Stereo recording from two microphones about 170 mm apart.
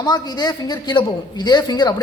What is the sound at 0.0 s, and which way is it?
A man's voice, 25° left (ahead or behind).